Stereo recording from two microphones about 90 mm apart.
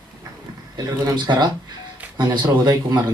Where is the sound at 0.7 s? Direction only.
50° right (ahead or behind).